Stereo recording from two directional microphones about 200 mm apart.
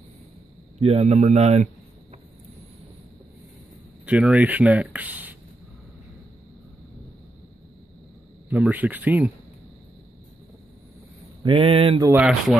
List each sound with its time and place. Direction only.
0.7 s a man's voice: 30° right (ahead or behind)
4.0 s speech: 5° right (ahead or behind)
8.5 s speech: 10° right (ahead or behind)
11.4 s a sound: 25° right (ahead or behind)
12.2 s speech: centre (ahead or behind)